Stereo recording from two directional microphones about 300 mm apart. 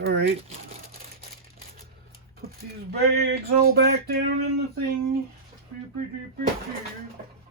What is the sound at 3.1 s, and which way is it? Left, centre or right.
Speech, right.